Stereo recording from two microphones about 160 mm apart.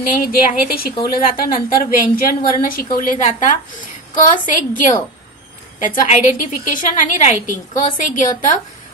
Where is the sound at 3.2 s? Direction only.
50° left (ahead or behind).